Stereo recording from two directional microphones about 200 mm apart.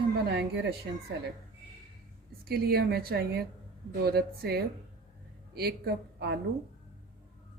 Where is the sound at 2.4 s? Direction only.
50° right (ahead or behind).